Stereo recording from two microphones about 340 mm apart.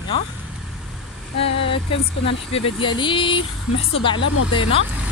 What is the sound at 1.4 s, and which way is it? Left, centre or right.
Speech, centre.